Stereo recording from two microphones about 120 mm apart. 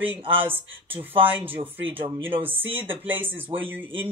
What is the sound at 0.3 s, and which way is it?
Speech, 15° right (ahead or behind).